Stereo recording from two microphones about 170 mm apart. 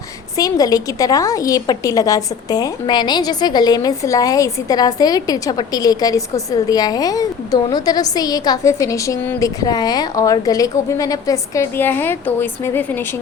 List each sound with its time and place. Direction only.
0.3 s a woman's voice: 20° left (ahead or behind)